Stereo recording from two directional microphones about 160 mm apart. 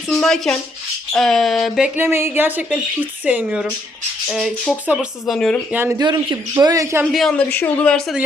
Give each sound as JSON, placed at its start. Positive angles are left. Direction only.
{"t": 0.1, "sound": "speech", "side_deg": 0}
{"t": 2.0, "sound": "speech", "side_deg": -15}
{"t": 5.7, "sound": "speech", "side_deg": -15}
{"t": 6.0, "sound": "speech", "side_deg": -30}
{"t": 7.0, "sound": "speech", "side_deg": 0}